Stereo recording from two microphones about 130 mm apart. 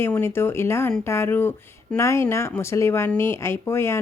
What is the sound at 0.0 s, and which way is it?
Speech, 20° left (ahead or behind).